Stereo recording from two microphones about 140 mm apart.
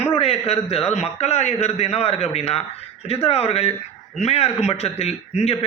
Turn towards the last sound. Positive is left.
turn(degrees=45)  # may be behind; listen again after turning